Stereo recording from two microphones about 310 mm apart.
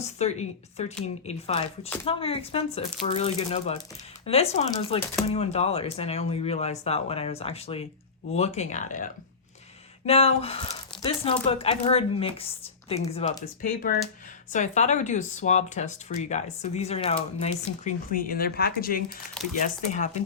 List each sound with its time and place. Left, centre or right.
0.0 s speech: left
10.1 s speech: centre